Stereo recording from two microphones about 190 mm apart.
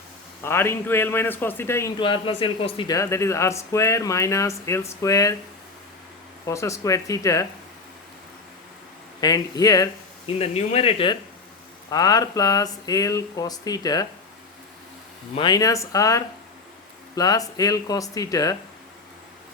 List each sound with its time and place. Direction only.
0.4 s speech: 15° left (ahead or behind)
2.0 s speech: 25° left (ahead or behind)
6.4 s speech: 15° left (ahead or behind)
9.2 s speech: 20° left (ahead or behind)
10.3 s speech: 30° left (ahead or behind)
15.4 s speech: 20° left (ahead or behind)